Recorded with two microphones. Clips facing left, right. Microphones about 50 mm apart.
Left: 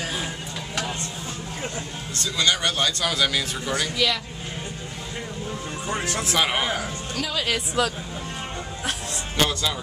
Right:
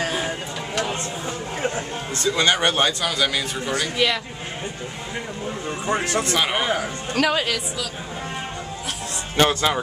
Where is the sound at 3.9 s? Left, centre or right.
Right.